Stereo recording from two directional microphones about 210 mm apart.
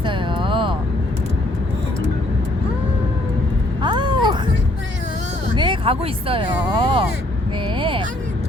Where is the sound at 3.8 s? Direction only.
20° right (ahead or behind).